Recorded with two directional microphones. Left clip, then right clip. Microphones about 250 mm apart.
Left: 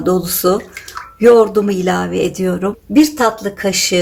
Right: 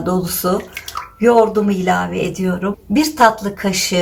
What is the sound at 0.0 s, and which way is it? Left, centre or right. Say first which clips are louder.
Speech: left 4 dB; left.